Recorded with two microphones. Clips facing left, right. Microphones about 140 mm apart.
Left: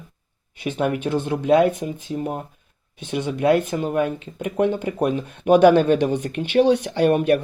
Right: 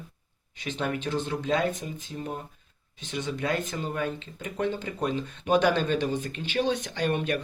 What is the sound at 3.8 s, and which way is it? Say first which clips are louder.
Speech: left 9 dB; 55° left (ahead or behind).